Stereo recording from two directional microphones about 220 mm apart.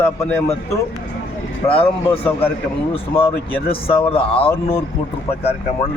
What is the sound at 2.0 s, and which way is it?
Speech, 10° left (ahead or behind).